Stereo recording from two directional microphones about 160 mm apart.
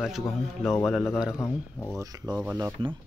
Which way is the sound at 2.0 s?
20° right (ahead or behind).